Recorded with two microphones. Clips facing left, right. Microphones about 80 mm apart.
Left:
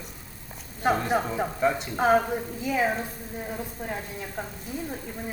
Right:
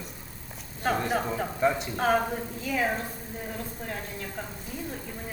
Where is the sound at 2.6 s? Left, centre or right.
Centre.